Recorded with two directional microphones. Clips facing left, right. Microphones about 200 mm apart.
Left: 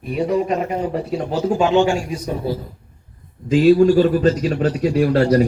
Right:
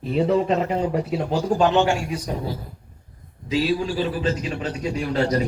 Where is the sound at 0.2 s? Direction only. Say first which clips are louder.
Left 1 dB; 15° left (ahead or behind).